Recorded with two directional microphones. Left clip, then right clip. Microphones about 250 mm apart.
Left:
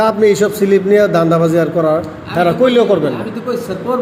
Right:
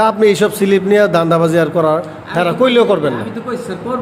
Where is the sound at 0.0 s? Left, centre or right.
Centre.